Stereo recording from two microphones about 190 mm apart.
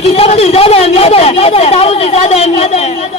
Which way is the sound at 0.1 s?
30° left (ahead or behind).